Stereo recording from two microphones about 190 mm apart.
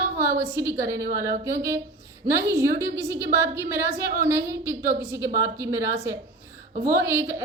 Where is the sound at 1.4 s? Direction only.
15° right (ahead or behind).